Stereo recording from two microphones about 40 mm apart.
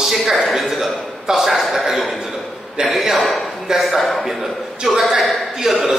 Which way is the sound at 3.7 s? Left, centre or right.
Centre.